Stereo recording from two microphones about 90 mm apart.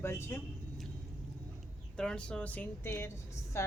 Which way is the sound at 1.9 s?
10° left (ahead or behind).